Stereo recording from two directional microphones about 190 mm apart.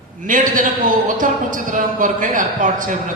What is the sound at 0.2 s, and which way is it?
A man's voice, 45° right (ahead or behind).